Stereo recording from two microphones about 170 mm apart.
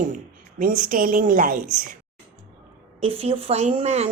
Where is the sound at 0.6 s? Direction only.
55° right (ahead or behind).